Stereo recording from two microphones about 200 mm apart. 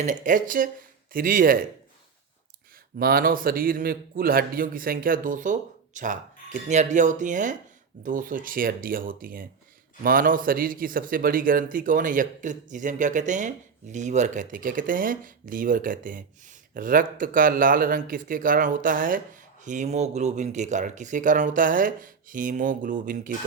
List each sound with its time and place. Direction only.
0.0 s a man's voice: 40° right (ahead or behind)
3.0 s a man's voice: 45° right (ahead or behind)